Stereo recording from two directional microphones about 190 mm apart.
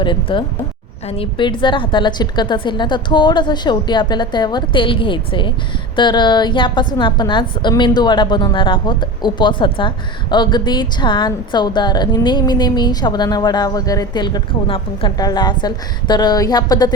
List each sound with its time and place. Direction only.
0.0 s a woman's voice: 25° left (ahead or behind)